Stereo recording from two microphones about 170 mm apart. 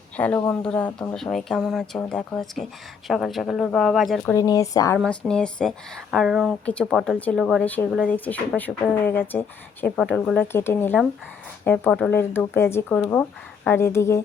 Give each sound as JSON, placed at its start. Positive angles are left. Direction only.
{"t": 0.2, "sound": "speech", "side_deg": 10}
{"t": 4.3, "sound": "speech", "side_deg": 20}
{"t": 4.9, "sound": "speech", "side_deg": 5}